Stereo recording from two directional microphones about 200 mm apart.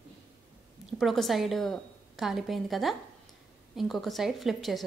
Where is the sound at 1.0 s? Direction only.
Centre (ahead or behind).